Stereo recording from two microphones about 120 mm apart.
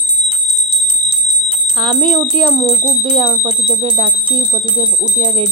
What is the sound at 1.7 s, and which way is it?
A woman's voice, 45° right (ahead or behind).